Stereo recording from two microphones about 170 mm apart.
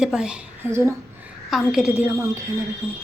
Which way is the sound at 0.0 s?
5° right (ahead or behind).